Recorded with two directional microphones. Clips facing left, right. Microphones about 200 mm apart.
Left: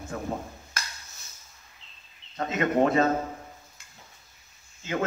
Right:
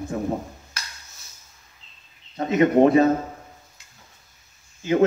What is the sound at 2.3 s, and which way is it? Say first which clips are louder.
Speech: right 7 dB; 20° right (ahead or behind).